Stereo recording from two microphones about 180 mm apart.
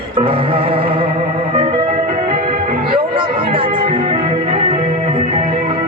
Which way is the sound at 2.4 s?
55° right (ahead or behind).